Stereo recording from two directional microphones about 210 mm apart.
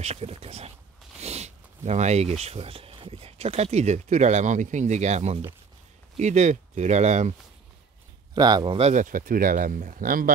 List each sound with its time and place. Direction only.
0.0 s speech: 30° right (ahead or behind)
8.4 s speech: 20° right (ahead or behind); by 10.3 s 40° right (ahead or behind)